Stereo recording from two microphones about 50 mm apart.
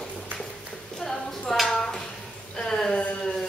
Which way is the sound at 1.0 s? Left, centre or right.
Centre.